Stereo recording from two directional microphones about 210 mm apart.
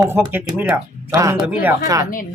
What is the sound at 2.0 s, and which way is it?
Speech, 40° left (ahead or behind).